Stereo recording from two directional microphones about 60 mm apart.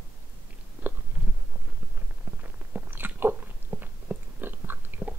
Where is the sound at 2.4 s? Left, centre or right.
Right.